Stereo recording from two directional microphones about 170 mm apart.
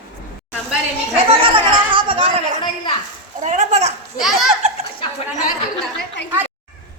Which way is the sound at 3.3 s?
45° right (ahead or behind).